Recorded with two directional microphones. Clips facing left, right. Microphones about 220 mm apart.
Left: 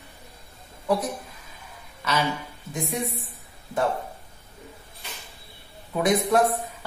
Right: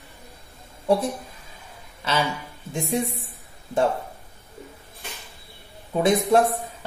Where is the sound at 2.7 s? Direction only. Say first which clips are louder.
Right 5 dB; 30° right (ahead or behind).